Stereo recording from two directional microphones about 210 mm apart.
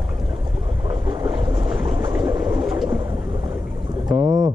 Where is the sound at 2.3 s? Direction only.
20° right (ahead or behind).